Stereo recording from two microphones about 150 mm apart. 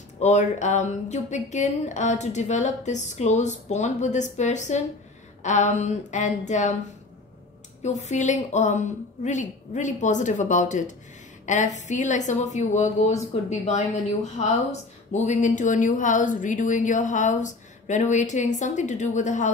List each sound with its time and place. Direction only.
0.2 s speech: 50° left (ahead or behind)
7.8 s speech: 50° left (ahead or behind)